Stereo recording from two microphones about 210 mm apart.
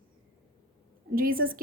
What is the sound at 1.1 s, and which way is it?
Speech, 45° right (ahead or behind).